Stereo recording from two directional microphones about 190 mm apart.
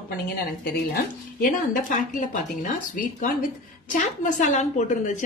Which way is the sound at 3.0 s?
45° left (ahead or behind).